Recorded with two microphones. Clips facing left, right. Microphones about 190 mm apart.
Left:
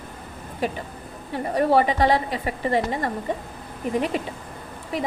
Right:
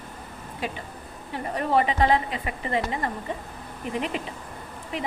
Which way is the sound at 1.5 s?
35° left (ahead or behind).